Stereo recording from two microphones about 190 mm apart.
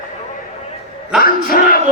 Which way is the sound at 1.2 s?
45° left (ahead or behind).